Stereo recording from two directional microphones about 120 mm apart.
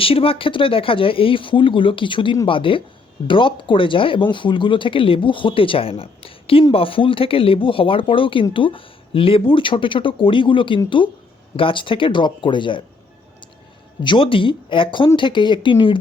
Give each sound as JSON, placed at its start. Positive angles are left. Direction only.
{"t": 0.0, "sound": "speech", "side_deg": 50}
{"t": 14.0, "sound": "speech", "side_deg": 45}